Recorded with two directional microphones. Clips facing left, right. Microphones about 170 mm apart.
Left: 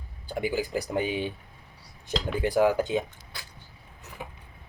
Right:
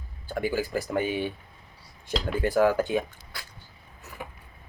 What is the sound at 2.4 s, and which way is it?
Speech, 15° left (ahead or behind).